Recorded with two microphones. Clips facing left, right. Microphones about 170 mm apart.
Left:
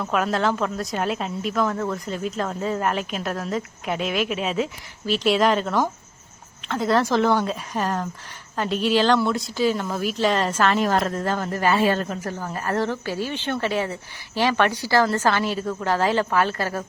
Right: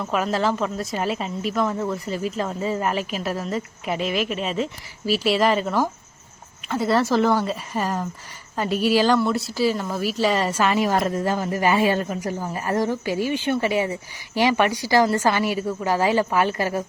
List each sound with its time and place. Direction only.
0.0 s a woman's voice: centre (ahead or behind)